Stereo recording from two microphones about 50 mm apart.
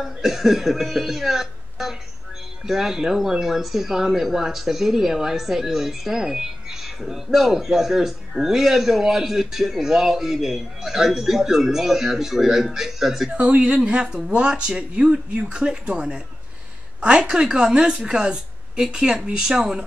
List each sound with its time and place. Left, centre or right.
0.0 s speech: centre
13.3 s speech: right
17.3 s speech: centre